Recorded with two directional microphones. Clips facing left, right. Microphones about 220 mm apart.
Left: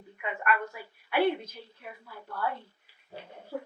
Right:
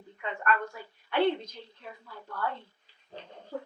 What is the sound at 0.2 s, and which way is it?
Speech, 10° left (ahead or behind).